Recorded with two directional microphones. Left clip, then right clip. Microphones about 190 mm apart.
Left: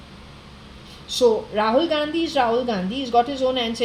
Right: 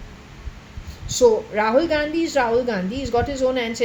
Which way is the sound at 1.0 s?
25° right (ahead or behind).